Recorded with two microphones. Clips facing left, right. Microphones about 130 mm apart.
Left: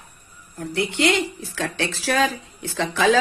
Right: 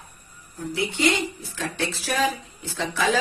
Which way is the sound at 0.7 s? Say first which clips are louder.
Left 3 dB; 75° left (ahead or behind).